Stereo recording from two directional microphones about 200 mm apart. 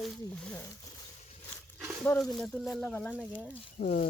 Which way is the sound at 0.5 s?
15° left (ahead or behind).